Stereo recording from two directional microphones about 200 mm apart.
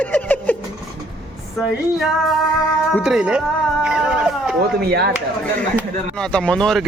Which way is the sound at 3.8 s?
5° right (ahead or behind).